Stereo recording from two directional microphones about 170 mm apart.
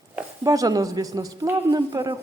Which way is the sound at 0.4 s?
20° right (ahead or behind).